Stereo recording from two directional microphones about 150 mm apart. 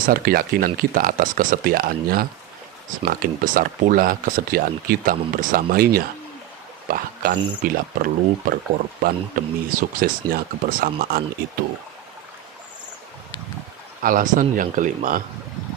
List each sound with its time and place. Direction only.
0.0 s speech: 80° right
14.0 s speech: 65° right (ahead or behind)